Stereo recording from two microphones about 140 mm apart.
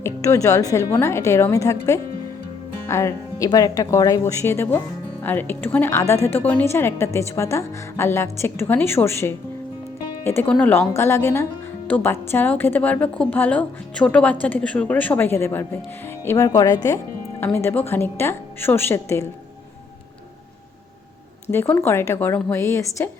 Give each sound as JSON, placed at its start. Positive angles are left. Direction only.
{"t": 0.0, "sound": "speech", "side_deg": 20}
{"t": 2.8, "sound": "a woman's voice", "side_deg": 20}
{"t": 21.5, "sound": "a woman's voice", "side_deg": 15}